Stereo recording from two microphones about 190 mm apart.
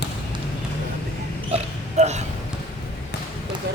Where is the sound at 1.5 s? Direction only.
35° right (ahead or behind).